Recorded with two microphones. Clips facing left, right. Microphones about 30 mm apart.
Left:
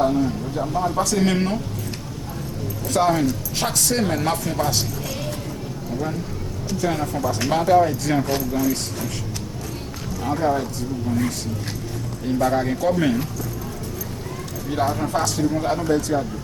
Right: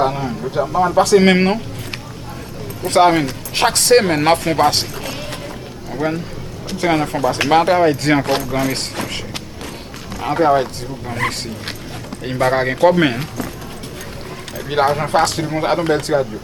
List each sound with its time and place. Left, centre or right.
0.0 s speech: right
2.8 s speech: right
14.7 s speech: right